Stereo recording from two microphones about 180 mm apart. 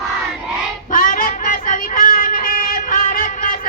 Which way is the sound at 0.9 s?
50° left (ahead or behind).